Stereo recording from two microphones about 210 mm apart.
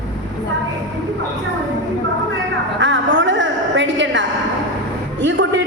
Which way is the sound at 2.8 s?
60° right (ahead or behind).